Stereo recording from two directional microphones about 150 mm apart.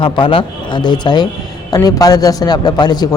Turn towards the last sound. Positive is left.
turn(degrees=25)  # may be behind; listen again after turning